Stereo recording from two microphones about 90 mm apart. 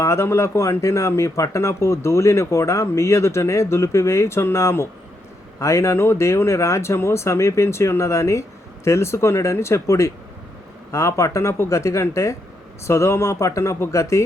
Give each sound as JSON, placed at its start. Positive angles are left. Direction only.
{"t": 0.0, "sound": "speech", "side_deg": 30}